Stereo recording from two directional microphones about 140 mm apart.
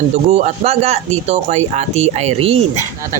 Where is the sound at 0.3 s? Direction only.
50° right (ahead or behind).